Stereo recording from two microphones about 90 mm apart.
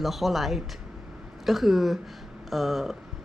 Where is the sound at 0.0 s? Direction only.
Centre (ahead or behind).